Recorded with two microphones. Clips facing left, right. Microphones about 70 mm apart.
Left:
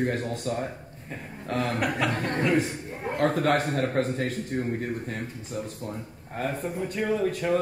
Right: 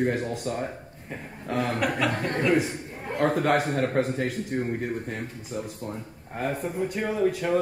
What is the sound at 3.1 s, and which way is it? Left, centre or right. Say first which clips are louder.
A man's voice: right 1 dB; centre.